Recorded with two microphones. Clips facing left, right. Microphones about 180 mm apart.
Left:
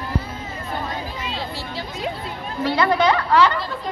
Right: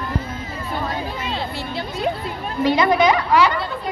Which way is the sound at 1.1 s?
60° right (ahead or behind).